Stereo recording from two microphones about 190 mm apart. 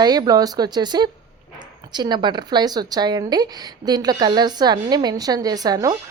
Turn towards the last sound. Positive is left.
turn(degrees=-20)  # may be behind; listen again after turning